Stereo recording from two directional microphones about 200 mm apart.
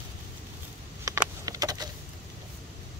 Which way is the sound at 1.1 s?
15° right (ahead or behind).